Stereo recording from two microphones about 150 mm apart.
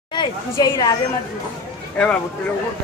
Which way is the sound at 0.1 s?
30° left (ahead or behind).